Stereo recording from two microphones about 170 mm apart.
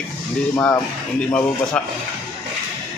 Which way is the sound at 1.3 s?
5° left (ahead or behind).